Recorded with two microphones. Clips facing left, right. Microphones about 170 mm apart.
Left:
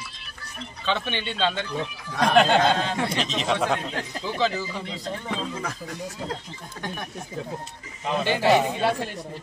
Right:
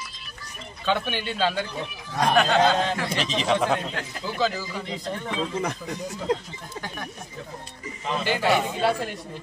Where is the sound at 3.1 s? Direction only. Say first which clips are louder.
Right 1 dB; centre (ahead or behind).